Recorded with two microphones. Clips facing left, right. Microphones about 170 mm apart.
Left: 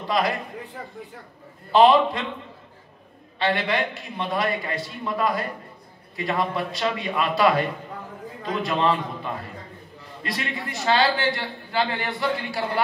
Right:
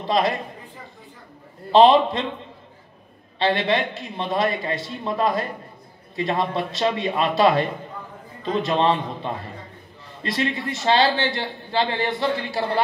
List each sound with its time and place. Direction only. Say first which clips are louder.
0.0 s speech: right 3 dB; 25° right (ahead or behind)
1.7 s a man's voice: right 2 dB; 25° right (ahead or behind)
3.3 s a man's voice: right 3 dB; 25° right (ahead or behind)